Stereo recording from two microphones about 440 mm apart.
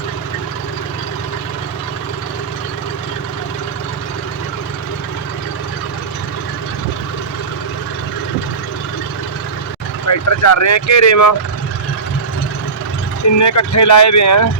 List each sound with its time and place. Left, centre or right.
10.1 s speech: left
13.4 s speech: left